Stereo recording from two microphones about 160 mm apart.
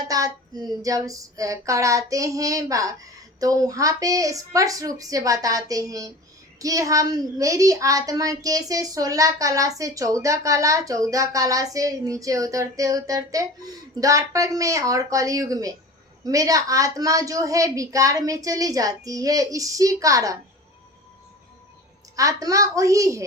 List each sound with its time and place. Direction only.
0.0 s child singing: 25° right (ahead or behind)
22.1 s child singing: 20° right (ahead or behind)